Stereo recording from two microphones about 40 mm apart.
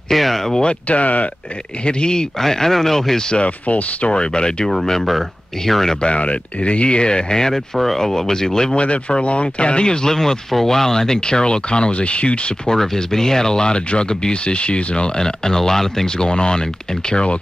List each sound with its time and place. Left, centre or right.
0.1 s speech: centre
0.7 s speech: left
1.9 s speech: left
3.3 s speech: left
4.1 s speech: left
4.6 s speech: centre
6.0 s speech: left; by 8.7 s centre
8.7 s speech: left
12.6 s speech: centre